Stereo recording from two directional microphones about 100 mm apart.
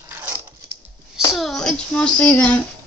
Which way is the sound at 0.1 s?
20° right (ahead or behind).